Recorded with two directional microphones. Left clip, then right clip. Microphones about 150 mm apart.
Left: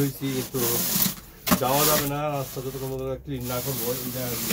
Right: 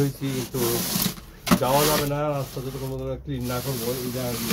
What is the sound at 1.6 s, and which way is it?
Speech, 15° left (ahead or behind).